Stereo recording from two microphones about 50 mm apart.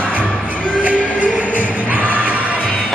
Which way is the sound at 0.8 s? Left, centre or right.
Right.